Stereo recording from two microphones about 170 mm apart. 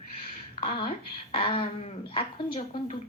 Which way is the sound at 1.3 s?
30° left (ahead or behind).